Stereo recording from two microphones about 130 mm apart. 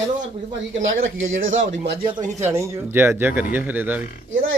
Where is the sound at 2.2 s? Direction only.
65° right (ahead or behind).